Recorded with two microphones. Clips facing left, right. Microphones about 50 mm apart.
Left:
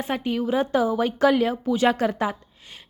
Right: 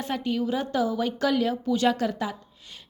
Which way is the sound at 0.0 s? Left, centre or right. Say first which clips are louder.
Left 2 dB; left.